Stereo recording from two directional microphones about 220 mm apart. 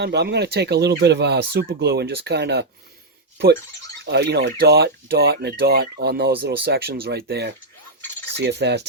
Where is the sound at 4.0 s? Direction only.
50° right (ahead or behind).